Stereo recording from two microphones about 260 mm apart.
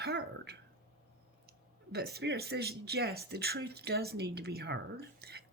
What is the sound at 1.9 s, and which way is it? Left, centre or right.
Speech, right.